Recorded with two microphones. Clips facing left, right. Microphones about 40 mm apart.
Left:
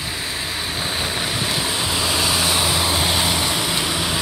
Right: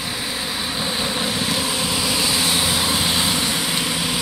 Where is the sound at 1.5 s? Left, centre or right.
Left.